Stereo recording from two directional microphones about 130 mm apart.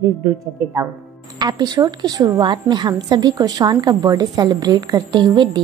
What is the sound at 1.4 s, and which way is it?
A woman's voice, 30° right (ahead or behind).